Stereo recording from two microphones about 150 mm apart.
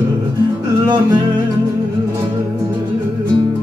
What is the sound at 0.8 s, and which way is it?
Music, 30° right (ahead or behind).